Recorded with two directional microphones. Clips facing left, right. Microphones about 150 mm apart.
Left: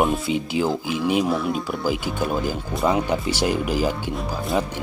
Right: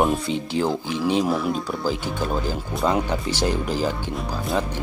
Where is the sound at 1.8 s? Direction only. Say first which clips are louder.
Left 1 dB; 10° left (ahead or behind).